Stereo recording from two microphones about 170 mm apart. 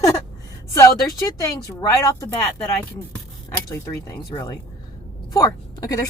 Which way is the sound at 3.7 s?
20° left (ahead or behind).